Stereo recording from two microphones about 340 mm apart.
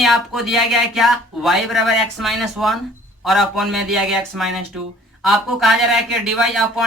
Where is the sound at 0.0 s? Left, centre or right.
Centre.